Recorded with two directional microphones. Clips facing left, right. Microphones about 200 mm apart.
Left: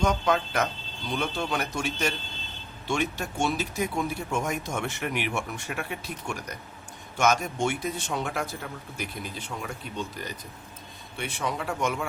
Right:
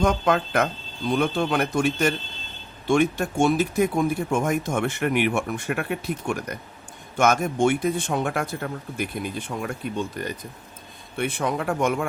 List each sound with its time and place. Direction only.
0.0 s a man's voice: 55° right (ahead or behind)